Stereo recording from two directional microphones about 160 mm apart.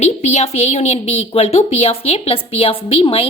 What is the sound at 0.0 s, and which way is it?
A woman's voice, 45° left (ahead or behind).